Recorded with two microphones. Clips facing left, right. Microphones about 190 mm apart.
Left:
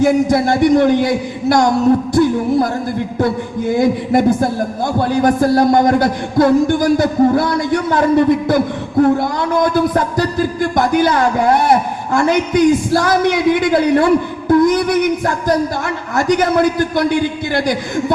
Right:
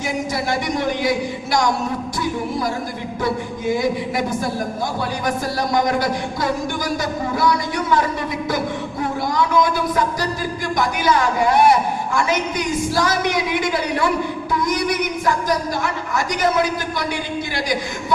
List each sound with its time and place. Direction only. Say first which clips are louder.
0.0 s a man's voice: left 11 dB; 55° left (ahead or behind)